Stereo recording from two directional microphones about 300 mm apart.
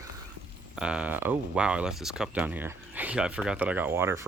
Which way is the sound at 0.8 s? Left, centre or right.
Centre.